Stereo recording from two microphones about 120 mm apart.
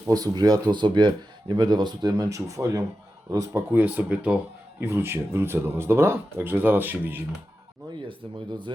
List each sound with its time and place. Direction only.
0.1 s speech: 35° right (ahead or behind); by 7.2 s 15° right (ahead or behind)